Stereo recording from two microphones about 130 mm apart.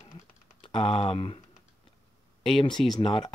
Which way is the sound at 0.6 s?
45° left (ahead or behind).